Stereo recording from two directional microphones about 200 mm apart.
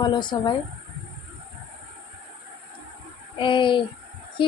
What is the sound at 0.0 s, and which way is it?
Speech, 20° left (ahead or behind).